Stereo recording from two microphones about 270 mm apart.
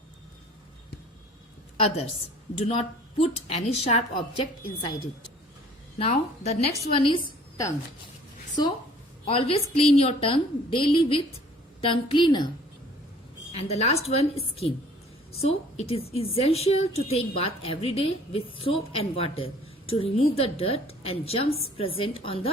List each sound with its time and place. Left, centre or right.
3.2 s a woman's voice: left
6.0 s a woman's voice: left
8.6 s a woman's voice: centre
13.5 s a woman's voice: left